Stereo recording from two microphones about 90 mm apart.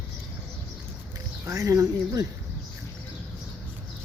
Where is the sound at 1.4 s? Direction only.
40° right (ahead or behind).